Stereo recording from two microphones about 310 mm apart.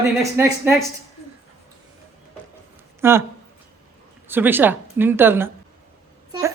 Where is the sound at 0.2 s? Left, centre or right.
Centre.